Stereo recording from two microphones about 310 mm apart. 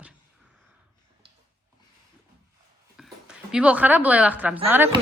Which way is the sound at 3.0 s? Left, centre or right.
Centre.